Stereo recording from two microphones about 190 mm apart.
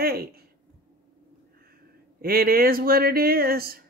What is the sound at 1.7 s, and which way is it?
Speech, 50° right (ahead or behind).